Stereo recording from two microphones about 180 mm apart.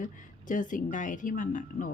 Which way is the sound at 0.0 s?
45° left (ahead or behind).